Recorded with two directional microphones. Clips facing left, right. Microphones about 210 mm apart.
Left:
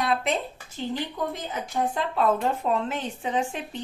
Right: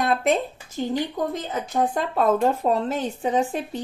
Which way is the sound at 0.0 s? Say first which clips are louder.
Right 4 dB; 45° right (ahead or behind).